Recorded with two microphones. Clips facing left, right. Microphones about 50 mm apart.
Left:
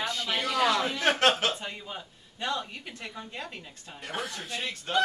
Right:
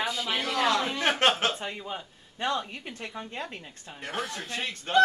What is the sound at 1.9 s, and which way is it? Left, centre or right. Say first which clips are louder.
A woman's voice: right 3 dB; right.